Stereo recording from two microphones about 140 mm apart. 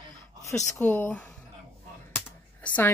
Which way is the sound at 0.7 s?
15° left (ahead or behind).